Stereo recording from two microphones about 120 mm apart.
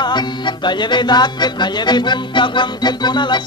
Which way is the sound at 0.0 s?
35° left (ahead or behind).